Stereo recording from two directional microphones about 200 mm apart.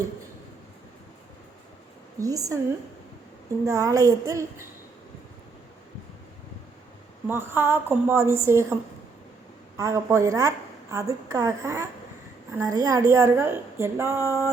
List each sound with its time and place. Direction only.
2.1 s a woman's voice: 15° right (ahead or behind)
3.7 s a woman's voice: 15° right (ahead or behind)
7.3 s a woman's voice: 10° right (ahead or behind)